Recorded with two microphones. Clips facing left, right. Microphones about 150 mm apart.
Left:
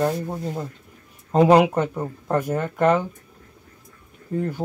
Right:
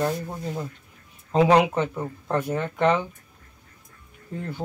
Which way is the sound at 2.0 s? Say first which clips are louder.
Left 3 dB; 15° left (ahead or behind).